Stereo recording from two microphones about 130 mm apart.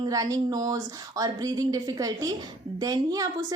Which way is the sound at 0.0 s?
30° right (ahead or behind).